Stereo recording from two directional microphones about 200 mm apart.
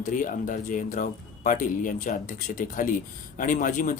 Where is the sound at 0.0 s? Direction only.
40° left (ahead or behind).